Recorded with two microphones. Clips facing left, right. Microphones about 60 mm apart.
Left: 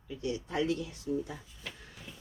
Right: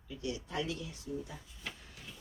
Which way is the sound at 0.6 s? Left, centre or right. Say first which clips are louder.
Left 7 dB; left.